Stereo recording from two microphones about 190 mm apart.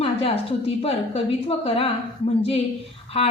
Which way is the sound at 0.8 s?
30° left (ahead or behind).